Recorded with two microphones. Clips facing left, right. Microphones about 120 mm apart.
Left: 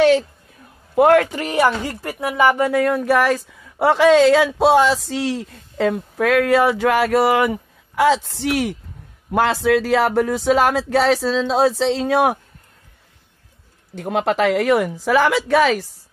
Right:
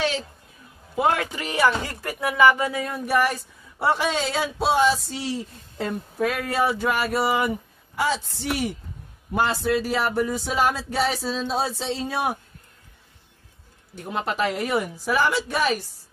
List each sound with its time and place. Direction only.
0.9 s a man's voice: 60° left (ahead or behind); by 2.7 s 40° left (ahead or behind)
2.7 s speech: 75° left (ahead or behind); by 12.4 s 90° left
13.9 s speech: 80° left